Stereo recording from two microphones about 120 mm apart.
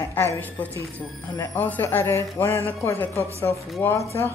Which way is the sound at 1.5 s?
15° left (ahead or behind).